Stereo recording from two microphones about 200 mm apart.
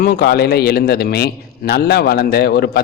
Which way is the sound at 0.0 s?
55° left (ahead or behind).